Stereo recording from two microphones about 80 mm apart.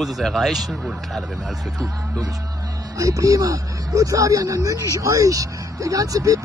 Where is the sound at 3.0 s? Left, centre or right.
Right.